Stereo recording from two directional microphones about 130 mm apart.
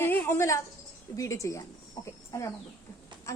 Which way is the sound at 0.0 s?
15° left (ahead or behind).